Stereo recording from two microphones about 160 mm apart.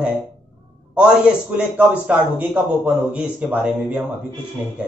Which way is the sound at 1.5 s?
5° right (ahead or behind).